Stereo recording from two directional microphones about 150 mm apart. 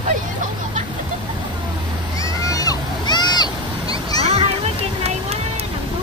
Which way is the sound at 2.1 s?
25° left (ahead or behind).